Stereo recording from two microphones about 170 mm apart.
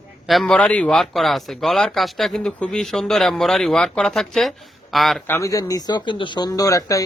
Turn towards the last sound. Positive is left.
turn(degrees=20)  # may be behind; listen again after turning